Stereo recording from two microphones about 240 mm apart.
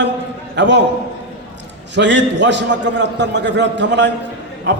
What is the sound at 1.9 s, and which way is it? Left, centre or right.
A man's voice, right.